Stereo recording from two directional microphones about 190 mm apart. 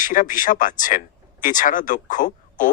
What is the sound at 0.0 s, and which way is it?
Speech, 45° left (ahead or behind).